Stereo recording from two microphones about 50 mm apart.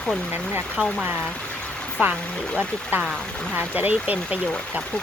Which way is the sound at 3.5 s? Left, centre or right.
Right.